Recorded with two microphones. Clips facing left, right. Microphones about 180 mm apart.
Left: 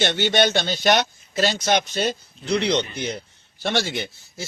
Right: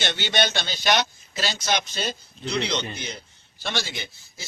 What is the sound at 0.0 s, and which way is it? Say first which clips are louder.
A man's voice: left 6 dB; 50° left (ahead or behind).